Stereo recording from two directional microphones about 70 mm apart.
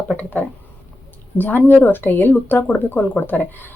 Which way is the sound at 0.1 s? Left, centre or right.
Left.